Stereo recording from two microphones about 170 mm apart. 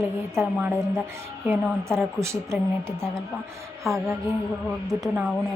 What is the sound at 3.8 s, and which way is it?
Speech, centre (ahead or behind).